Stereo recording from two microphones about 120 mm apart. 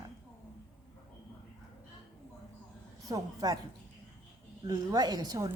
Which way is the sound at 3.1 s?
30° right (ahead or behind).